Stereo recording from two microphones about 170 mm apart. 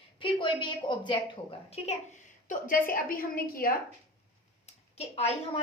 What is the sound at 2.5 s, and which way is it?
A woman's voice, 55° left (ahead or behind).